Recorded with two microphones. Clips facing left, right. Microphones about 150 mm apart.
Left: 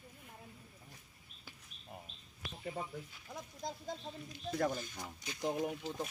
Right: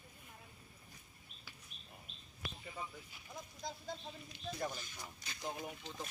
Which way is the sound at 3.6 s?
50° left (ahead or behind).